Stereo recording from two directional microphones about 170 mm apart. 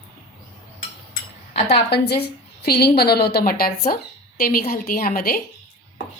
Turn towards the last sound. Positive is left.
turn(degrees=60)  # may be behind; listen again after turning